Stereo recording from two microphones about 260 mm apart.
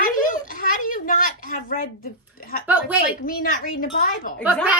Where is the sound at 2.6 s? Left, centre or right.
Centre.